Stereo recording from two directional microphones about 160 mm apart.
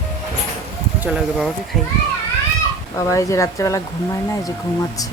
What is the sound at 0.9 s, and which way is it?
Speech, 5° right (ahead or behind).